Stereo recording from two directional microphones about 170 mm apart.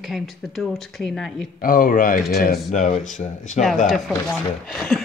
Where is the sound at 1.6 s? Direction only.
55° left (ahead or behind).